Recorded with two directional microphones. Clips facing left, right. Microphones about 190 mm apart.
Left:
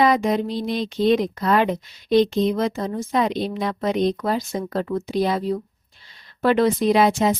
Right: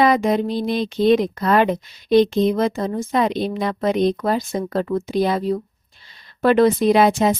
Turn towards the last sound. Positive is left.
turn(degrees=-55)  # may be behind; listen again after turning